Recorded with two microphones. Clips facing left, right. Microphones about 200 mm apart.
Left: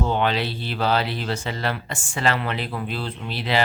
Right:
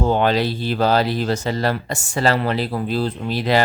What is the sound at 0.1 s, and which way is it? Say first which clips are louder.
Speech: right 5 dB; 40° right (ahead or behind).